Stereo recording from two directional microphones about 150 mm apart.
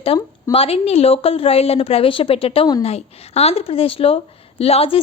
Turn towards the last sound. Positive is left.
turn(degrees=40)  # may be behind; listen again after turning